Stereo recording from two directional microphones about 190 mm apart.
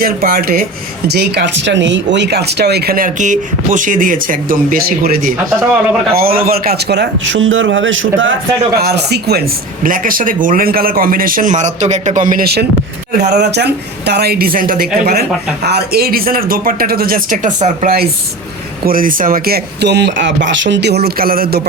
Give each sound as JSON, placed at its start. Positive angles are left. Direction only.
{"t": 0.0, "sound": "a man's voice", "side_deg": -50}
{"t": 8.8, "sound": "speech", "side_deg": -60}
{"t": 9.8, "sound": "a man's voice", "side_deg": -45}